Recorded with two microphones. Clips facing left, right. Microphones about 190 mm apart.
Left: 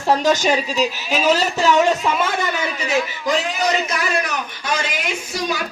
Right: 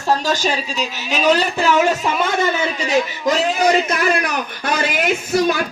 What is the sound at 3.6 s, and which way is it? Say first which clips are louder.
Speech: right 5 dB; 55° right (ahead or behind).